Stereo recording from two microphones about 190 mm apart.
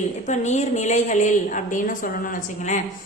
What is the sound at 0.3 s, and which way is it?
A woman's voice, 40° left (ahead or behind).